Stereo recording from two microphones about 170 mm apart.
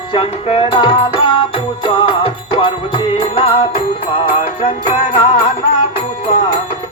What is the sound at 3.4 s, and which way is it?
Music, 30° left (ahead or behind).